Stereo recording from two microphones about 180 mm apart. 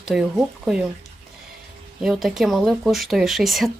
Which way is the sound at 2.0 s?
Centre (ahead or behind).